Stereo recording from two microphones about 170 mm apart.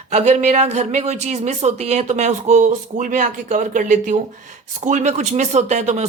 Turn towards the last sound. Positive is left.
turn(degrees=-40)  # may be behind; listen again after turning